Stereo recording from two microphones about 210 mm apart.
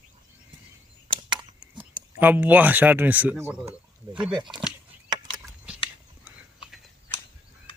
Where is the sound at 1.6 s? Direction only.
5° right (ahead or behind).